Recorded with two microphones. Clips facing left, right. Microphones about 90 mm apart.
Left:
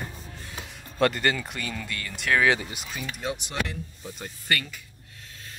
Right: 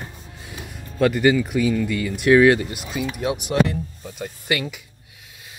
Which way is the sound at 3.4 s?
Centre (ahead or behind).